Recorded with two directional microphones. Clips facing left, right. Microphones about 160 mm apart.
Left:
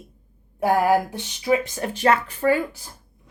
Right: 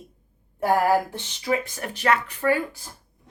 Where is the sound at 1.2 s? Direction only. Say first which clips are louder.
Left 4 dB; 15° left (ahead or behind).